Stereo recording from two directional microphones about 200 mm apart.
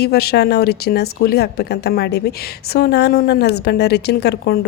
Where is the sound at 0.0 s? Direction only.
50° left (ahead or behind).